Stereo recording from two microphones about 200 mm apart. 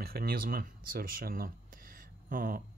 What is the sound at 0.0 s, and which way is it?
Speech, 50° right (ahead or behind).